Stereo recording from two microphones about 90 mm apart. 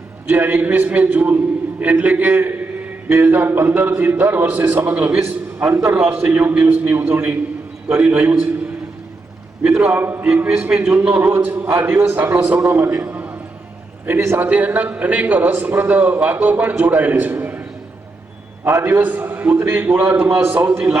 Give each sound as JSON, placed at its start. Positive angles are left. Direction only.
{"t": 0.3, "sound": "a man's voice", "side_deg": -20}
{"t": 9.6, "sound": "a man's voice", "side_deg": -20}
{"t": 18.6, "sound": "a man's voice", "side_deg": -25}